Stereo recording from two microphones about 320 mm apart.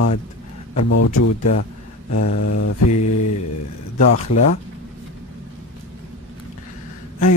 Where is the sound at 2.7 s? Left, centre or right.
Left.